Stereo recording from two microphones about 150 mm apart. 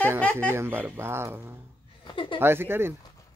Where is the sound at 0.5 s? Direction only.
15° right (ahead or behind).